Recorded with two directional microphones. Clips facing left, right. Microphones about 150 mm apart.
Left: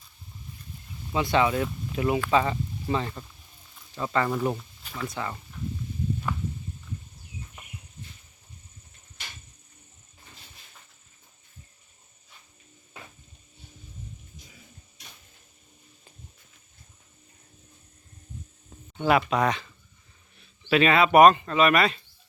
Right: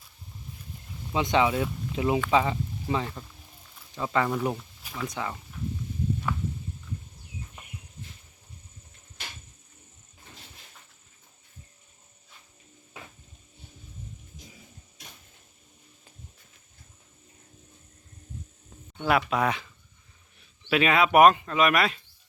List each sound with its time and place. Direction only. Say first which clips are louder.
1.1 s speech: even; 15° right (ahead or behind)
18.9 s speech: left 2 dB; centre (ahead or behind)